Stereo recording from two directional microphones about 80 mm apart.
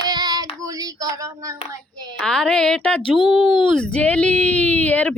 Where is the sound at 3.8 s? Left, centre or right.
Centre.